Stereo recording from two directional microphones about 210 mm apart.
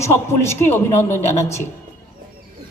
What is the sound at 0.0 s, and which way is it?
Speech, 10° left (ahead or behind).